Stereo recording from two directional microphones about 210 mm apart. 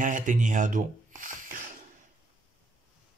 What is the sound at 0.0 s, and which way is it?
Speech, 35° right (ahead or behind).